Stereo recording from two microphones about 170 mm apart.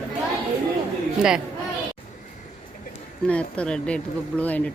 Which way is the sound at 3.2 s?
5° left (ahead or behind).